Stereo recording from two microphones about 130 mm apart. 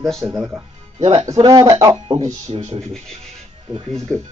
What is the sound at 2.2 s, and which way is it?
Speech, 55° right (ahead or behind).